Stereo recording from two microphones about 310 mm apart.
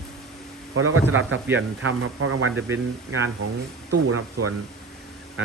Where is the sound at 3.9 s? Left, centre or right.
Right.